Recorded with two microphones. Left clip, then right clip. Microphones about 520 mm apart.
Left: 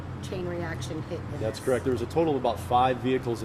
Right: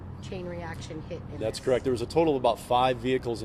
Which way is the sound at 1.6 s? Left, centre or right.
Right.